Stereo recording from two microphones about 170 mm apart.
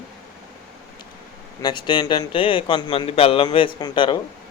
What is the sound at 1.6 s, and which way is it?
A man's voice, 25° left (ahead or behind).